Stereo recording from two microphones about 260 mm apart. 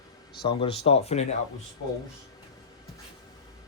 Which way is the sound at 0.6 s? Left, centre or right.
Left.